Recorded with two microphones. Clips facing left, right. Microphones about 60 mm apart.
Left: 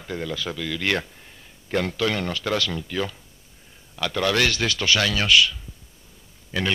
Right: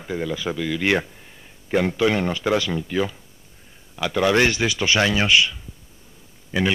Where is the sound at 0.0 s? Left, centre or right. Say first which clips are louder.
Right 3 dB; centre.